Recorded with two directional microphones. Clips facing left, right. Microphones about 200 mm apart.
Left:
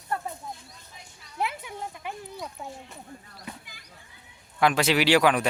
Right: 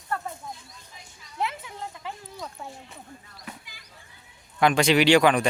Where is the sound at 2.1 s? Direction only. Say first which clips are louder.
Left 1 dB; 15° left (ahead or behind).